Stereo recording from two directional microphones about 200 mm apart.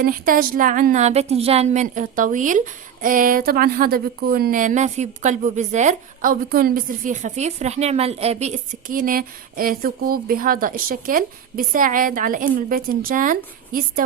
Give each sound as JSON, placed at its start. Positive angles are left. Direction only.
{"t": 0.0, "sound": "speech", "side_deg": -45}